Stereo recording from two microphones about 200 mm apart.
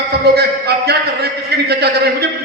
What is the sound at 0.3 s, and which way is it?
A man's voice, 55° right (ahead or behind).